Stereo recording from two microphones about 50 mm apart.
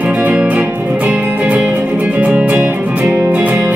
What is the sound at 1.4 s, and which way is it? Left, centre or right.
Music, right.